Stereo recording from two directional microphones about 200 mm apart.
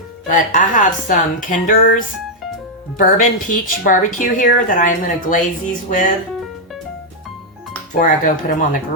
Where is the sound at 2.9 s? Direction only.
40° left (ahead or behind).